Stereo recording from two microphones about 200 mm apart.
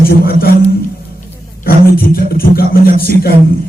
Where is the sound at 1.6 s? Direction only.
50° left (ahead or behind).